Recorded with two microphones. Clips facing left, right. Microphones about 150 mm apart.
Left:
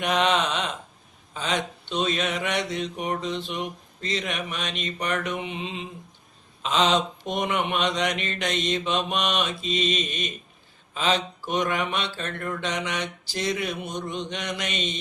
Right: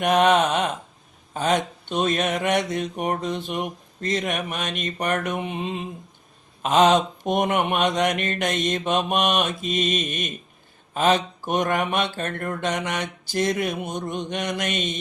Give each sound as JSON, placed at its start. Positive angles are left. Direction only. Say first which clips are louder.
{"t": 0.0, "sound": "mantra", "louder": "right 5 dB", "side_deg": -50}